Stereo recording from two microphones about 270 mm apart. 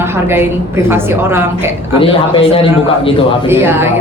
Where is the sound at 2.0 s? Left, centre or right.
Centre.